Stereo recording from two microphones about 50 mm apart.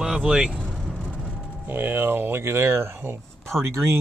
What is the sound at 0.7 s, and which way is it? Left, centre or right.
Vehicle, centre.